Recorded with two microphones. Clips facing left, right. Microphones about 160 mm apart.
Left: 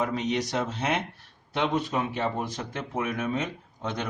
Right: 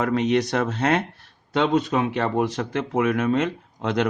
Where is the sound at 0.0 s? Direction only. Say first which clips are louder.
Right 7 dB; 75° right (ahead or behind).